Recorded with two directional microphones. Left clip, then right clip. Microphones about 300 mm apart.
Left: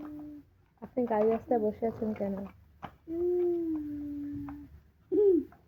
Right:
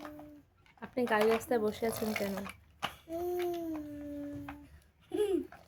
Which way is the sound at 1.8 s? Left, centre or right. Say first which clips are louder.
Left 1 dB; right.